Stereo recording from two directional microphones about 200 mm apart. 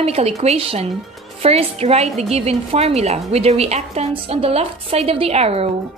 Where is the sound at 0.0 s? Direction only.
30° right (ahead or behind).